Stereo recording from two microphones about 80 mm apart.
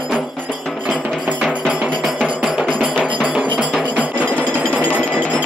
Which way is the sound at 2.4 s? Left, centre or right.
Centre.